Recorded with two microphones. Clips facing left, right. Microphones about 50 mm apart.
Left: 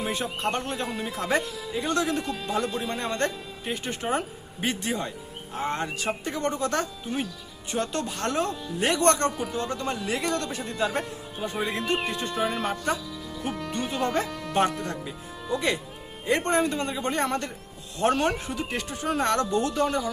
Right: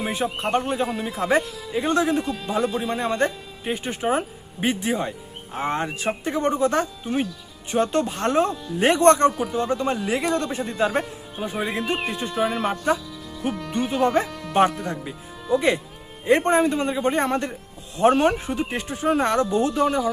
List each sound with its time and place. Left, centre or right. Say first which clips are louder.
0.0 s speech: right 3 dB; centre
0.9 s speech: right 4 dB; centre
1.7 s speech: right 5 dB; right
2.0 s speech: right 5 dB; centre
9.4 s speech: right 6 dB; centre
13.5 s music: right 3 dB; centre
13.7 s speech: right 7 dB; centre
14.3 s music: even; centre
15.5 s speech: right 6 dB; centre